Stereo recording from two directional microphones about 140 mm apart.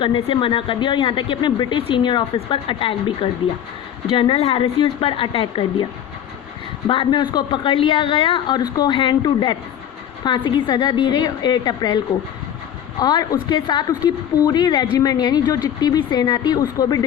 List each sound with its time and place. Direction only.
0.0 s speech: 35° left (ahead or behind)
6.8 s speech: 35° left (ahead or behind)
13.0 s speech: 30° left (ahead or behind)